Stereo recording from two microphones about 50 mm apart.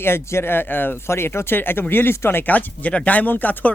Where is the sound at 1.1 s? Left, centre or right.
Left.